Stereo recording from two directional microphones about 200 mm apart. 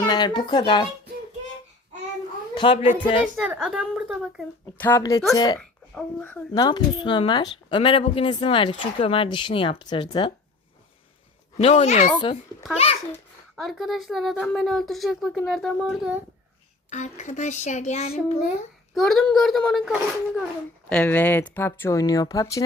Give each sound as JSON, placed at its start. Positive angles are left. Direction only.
{"t": 0.1, "sound": "speech", "side_deg": 20}
{"t": 2.6, "sound": "speech", "side_deg": 25}
{"t": 2.8, "sound": "speech", "side_deg": -10}
{"t": 4.8, "sound": "speech", "side_deg": 15}
{"t": 5.5, "sound": "speech", "side_deg": 5}
{"t": 11.5, "sound": "speech", "side_deg": 30}
{"t": 12.1, "sound": "speech", "side_deg": 20}
{"t": 13.6, "sound": "speech", "side_deg": 0}
{"t": 16.9, "sound": "speech", "side_deg": 35}
{"t": 18.9, "sound": "speech", "side_deg": 0}
{"t": 20.9, "sound": "speech", "side_deg": 10}